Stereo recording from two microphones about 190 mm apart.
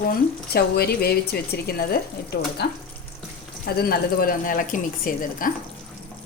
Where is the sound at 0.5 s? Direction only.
55° left (ahead or behind).